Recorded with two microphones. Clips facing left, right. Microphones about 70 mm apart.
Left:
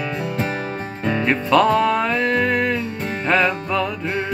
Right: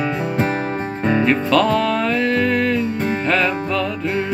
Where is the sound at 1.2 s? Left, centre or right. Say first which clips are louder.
Left 2 dB; left.